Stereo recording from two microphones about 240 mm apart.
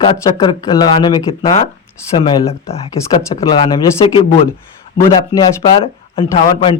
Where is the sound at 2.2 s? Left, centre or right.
Left.